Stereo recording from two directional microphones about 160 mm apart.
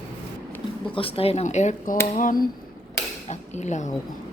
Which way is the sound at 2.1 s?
60° left (ahead or behind).